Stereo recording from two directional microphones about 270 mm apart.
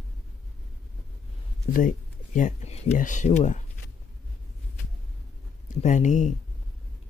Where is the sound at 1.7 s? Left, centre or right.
Left.